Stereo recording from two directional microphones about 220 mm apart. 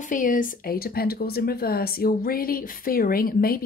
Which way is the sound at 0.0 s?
35° left (ahead or behind).